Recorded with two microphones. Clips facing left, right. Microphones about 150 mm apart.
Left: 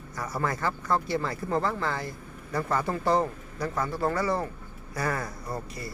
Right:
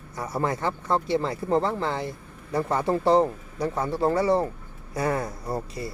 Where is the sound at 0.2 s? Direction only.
25° right (ahead or behind).